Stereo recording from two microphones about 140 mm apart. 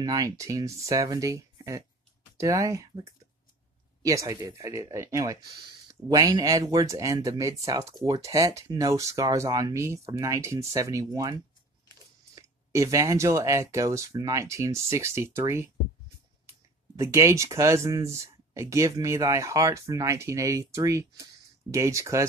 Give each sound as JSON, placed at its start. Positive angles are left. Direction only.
{"t": 0.0, "sound": "speech", "side_deg": -25}
{"t": 4.0, "sound": "speech", "side_deg": -25}